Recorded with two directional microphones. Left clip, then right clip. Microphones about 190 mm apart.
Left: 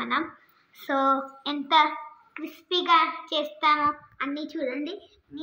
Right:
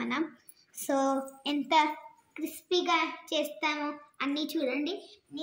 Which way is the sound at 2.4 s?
40° right (ahead or behind).